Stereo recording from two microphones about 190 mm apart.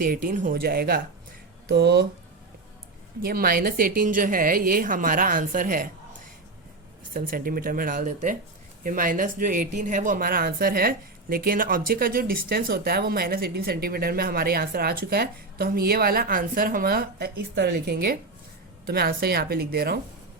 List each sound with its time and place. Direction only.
0.0 s speech: 45° right (ahead or behind)
3.2 s speech: 50° right (ahead or behind)
7.1 s a woman's voice: 50° right (ahead or behind)